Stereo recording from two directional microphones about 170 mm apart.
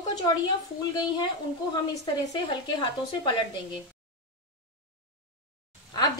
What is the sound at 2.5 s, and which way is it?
Speech, 25° left (ahead or behind).